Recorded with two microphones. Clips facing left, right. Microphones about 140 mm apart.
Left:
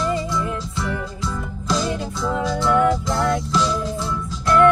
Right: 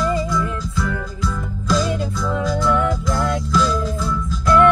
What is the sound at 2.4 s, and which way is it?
Music, 25° left (ahead or behind).